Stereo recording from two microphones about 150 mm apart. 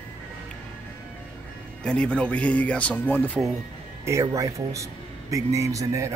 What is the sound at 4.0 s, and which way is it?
Speech, 20° right (ahead or behind).